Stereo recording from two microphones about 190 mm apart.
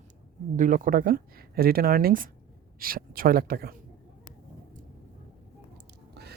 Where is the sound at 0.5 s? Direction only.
45° right (ahead or behind).